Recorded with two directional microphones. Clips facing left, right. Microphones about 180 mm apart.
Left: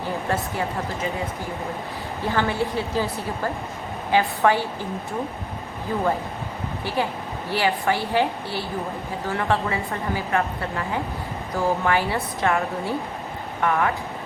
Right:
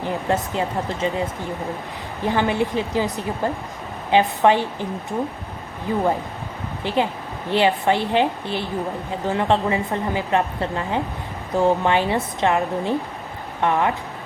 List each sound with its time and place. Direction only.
0.0 s a woman's voice: 20° right (ahead or behind)
2.2 s a woman's voice: 15° right (ahead or behind)
6.8 s a woman's voice: 20° right (ahead or behind)